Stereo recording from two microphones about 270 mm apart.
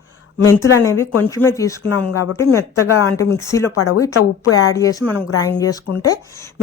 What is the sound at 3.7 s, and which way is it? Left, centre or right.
Speech, left.